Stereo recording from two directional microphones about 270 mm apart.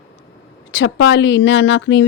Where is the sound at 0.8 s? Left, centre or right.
Left.